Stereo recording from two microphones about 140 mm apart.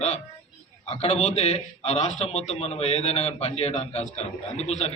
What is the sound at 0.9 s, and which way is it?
A man's voice, 50° left (ahead or behind).